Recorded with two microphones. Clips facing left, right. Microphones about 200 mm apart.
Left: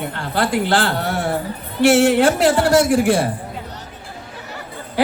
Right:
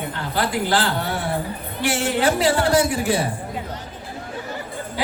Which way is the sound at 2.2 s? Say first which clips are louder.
Left 4 dB; 50° left (ahead or behind).